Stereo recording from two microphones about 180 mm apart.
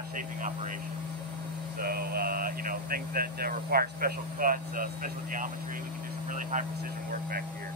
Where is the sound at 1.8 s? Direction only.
55° right (ahead or behind).